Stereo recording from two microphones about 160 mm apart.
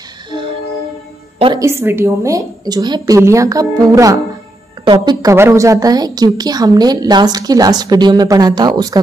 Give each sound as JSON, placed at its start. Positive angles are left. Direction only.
{"t": 1.6, "sound": "a woman's voice", "side_deg": -15}